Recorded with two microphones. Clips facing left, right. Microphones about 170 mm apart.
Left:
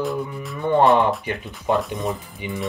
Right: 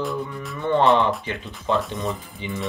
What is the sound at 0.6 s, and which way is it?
Speech, 15° left (ahead or behind).